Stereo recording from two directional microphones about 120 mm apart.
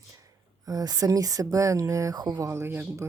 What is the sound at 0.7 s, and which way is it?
Speech, 30° right (ahead or behind).